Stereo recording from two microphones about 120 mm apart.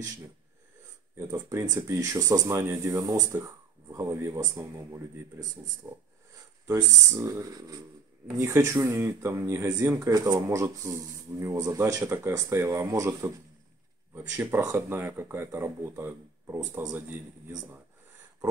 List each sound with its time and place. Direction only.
1.5 s speech: 25° right (ahead or behind)